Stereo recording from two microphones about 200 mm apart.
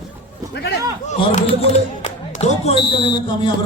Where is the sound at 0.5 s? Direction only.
55° left (ahead or behind).